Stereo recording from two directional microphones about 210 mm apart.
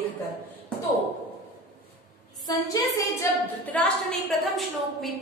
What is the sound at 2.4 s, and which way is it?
Speech, 15° left (ahead or behind).